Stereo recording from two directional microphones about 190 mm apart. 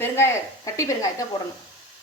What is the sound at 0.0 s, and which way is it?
Speech, 15° left (ahead or behind).